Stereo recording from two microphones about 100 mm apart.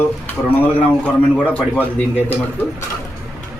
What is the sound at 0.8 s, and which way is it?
Speech, 15° left (ahead or behind).